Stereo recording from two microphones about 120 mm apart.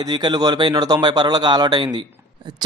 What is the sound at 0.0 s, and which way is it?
Speech, 35° right (ahead or behind).